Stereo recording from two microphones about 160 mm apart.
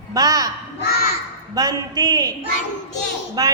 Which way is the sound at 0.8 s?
70° left (ahead or behind).